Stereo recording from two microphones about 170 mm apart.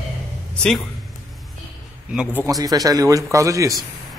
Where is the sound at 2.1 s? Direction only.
5° right (ahead or behind).